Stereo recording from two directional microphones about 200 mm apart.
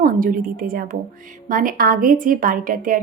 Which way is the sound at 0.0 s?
45° right (ahead or behind).